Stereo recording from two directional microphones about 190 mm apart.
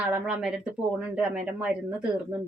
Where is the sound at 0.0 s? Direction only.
5° right (ahead or behind).